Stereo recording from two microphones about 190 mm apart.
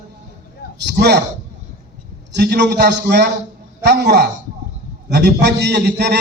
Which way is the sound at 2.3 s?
60° right (ahead or behind).